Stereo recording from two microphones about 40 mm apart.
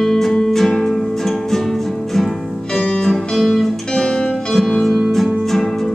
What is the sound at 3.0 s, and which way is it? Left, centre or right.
Music, centre.